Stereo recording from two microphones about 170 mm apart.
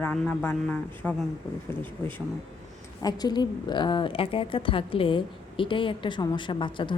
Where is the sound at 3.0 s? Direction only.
25° left (ahead or behind).